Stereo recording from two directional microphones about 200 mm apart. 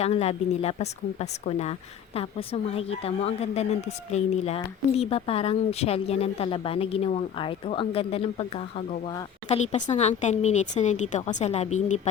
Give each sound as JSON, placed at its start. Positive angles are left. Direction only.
{"t": 0.0, "sound": "a woman's voice", "side_deg": 30}
{"t": 9.9, "sound": "a woman's voice", "side_deg": 35}